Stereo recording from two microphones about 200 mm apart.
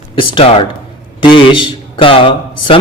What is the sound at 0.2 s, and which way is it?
Speech, 25° left (ahead or behind).